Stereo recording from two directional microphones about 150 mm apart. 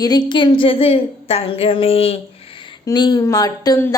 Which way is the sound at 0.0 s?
25° left (ahead or behind).